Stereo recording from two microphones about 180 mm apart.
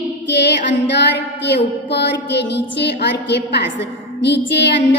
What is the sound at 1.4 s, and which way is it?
A woman's voice, 70° left (ahead or behind).